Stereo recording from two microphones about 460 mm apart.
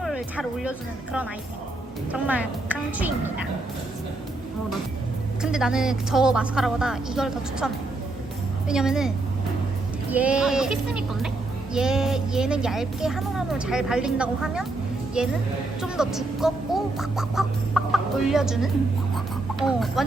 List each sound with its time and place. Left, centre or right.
0.0 s speech: centre
5.4 s speech: centre
15.8 s speech: centre
19.1 s a sound: centre